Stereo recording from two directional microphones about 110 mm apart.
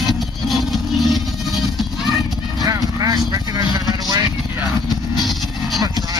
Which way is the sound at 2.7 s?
35° right (ahead or behind).